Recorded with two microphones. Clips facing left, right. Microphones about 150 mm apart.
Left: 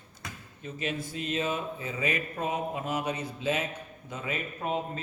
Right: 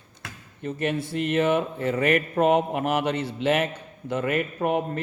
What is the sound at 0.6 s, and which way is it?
Speech, 65° right (ahead or behind).